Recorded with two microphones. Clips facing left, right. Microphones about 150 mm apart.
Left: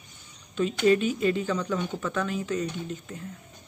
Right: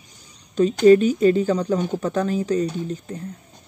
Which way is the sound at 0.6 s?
40° right (ahead or behind).